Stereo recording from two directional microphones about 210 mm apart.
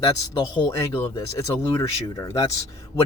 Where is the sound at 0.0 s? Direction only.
15° left (ahead or behind).